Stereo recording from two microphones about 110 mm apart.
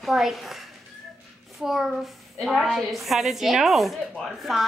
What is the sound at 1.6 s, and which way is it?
A woman's voice, centre (ahead or behind).